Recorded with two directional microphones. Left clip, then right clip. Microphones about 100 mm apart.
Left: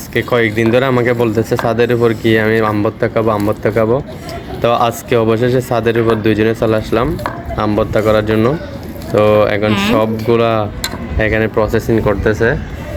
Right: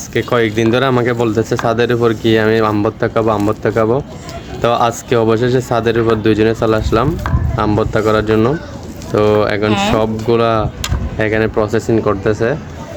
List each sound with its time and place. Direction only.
0.1 s speech: 75° right (ahead or behind); by 12.1 s 40° right (ahead or behind)
12.2 s speech: 25° right (ahead or behind)